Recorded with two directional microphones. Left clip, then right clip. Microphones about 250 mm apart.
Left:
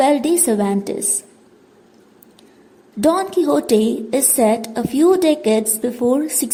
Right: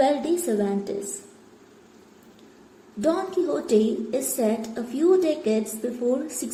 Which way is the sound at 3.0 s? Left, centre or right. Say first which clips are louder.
Left 8 dB; left.